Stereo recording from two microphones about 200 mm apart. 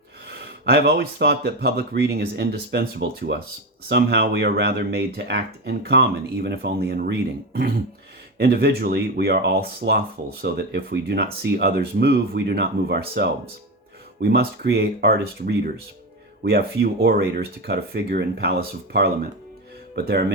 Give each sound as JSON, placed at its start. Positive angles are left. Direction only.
{"t": 0.3, "sound": "speech", "side_deg": -55}